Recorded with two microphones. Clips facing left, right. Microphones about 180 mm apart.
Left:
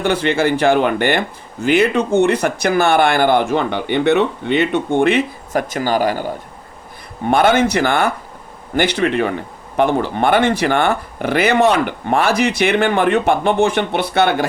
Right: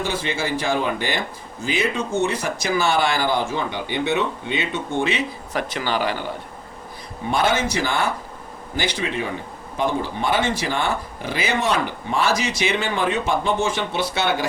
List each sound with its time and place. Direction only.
0.0 s speech: 65° left (ahead or behind); by 6.3 s 45° left (ahead or behind)
7.3 s speech: 60° left (ahead or behind)